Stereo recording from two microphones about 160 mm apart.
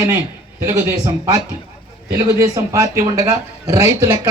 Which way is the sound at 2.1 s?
20° right (ahead or behind).